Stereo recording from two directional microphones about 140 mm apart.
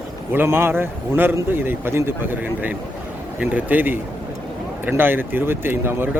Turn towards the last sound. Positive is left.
turn(degrees=-15)  # may be behind; listen again after turning